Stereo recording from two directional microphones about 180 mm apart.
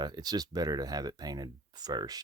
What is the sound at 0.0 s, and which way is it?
Speech, 20° right (ahead or behind).